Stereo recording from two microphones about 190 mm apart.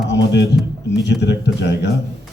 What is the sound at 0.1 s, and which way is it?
Speech, 65° left (ahead or behind).